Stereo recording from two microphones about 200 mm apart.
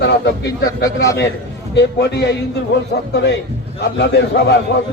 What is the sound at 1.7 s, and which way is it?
Speech, 60° left (ahead or behind).